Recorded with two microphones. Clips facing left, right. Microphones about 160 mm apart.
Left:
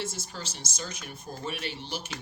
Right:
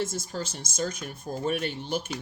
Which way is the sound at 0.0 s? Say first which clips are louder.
Right 6 dB; 45° right (ahead or behind).